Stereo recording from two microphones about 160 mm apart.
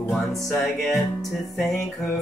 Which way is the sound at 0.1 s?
Centre (ahead or behind).